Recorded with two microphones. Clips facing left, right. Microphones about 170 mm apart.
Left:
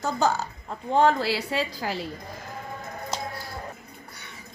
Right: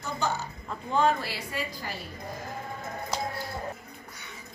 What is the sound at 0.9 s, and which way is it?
A woman's voice, 80° left.